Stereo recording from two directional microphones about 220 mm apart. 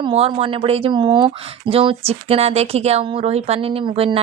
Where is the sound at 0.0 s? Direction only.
25° right (ahead or behind).